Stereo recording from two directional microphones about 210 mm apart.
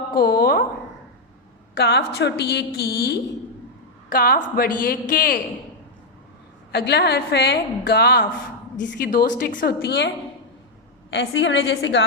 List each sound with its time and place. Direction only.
0.1 s a woman's voice: 45° left (ahead or behind)
1.7 s a woman's voice: 50° left (ahead or behind)
6.7 s a woman's voice: 50° left (ahead or behind)
11.1 s a woman's voice: 55° left (ahead or behind)